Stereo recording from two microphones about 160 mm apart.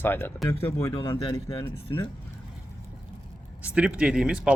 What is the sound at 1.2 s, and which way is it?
Speech, 35° left (ahead or behind).